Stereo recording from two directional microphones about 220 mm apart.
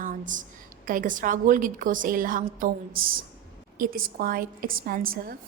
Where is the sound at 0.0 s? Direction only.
35° right (ahead or behind).